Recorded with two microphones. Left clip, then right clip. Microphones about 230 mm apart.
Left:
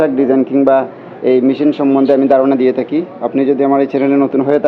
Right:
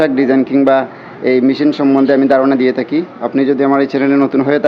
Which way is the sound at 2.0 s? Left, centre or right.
Right.